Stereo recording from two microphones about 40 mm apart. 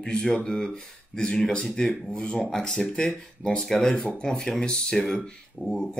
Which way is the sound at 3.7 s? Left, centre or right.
Left.